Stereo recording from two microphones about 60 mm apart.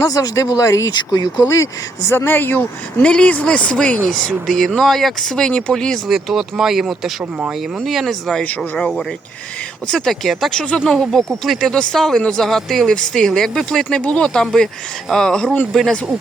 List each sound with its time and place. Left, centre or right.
0.0 s speech: left
2.1 s speech: left
3.0 s speech: centre
6.1 s speech: centre
10.1 s speech: centre